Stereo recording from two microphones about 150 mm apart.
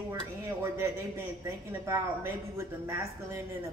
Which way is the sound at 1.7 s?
15° right (ahead or behind).